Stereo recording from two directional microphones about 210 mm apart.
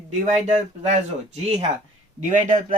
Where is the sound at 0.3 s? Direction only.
35° right (ahead or behind).